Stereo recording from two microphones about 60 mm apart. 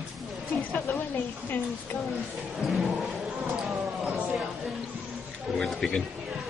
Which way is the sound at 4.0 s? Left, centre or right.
Centre.